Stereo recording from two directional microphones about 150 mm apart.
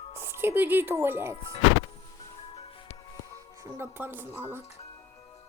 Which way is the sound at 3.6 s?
15° right (ahead or behind).